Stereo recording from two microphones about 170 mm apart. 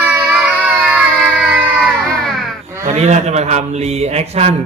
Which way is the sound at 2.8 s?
40° right (ahead or behind).